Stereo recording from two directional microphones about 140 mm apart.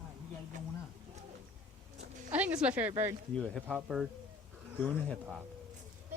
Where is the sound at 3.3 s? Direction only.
5° left (ahead or behind).